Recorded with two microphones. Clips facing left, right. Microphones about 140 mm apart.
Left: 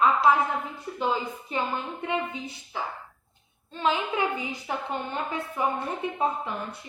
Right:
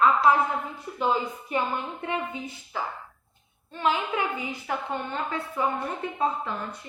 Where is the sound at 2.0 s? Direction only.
20° left (ahead or behind).